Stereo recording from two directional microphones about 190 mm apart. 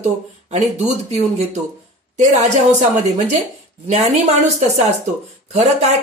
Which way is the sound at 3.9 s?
35° right (ahead or behind).